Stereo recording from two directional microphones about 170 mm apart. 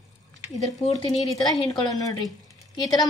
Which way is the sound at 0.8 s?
40° left (ahead or behind).